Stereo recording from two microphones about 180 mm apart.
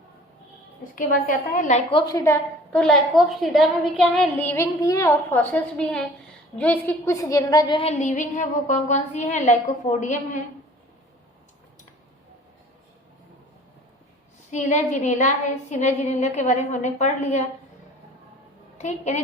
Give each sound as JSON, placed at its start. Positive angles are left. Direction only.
{"t": 0.9, "sound": "a woman's voice", "side_deg": 45}
{"t": 1.9, "sound": "a woman's voice", "side_deg": 25}
{"t": 2.7, "sound": "a woman's voice", "side_deg": 5}
{"t": 14.5, "sound": "a woman's voice", "side_deg": 40}
{"t": 18.8, "sound": "a woman's voice", "side_deg": 40}